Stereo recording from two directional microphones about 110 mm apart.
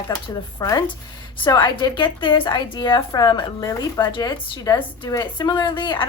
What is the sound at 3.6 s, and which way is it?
Speech, 30° left (ahead or behind).